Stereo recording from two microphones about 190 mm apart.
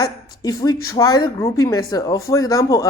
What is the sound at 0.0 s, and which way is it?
Speech, 20° left (ahead or behind).